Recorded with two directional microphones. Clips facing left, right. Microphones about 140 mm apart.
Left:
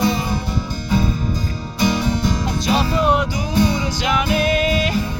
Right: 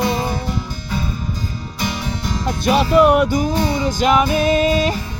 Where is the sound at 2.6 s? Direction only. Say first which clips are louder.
Right 6 dB; 60° right (ahead or behind); by 4.9 s 35° right (ahead or behind).